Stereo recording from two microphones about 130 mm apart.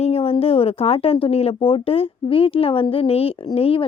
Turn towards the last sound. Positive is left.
turn(degrees=45)  # may be behind; listen again after turning